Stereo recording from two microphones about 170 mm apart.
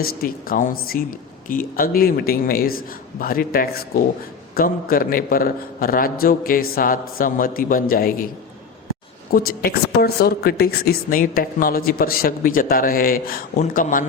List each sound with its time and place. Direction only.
0.0 s a woman's voice: 60° left (ahead or behind)
9.3 s a woman's voice: 60° left (ahead or behind)